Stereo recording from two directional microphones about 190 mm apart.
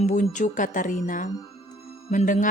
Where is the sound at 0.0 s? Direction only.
40° left (ahead or behind).